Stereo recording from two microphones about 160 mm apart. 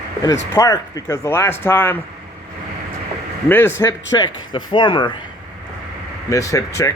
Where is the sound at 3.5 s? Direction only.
15° left (ahead or behind).